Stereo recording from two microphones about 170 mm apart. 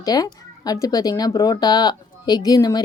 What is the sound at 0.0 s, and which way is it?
Speech, 20° left (ahead or behind).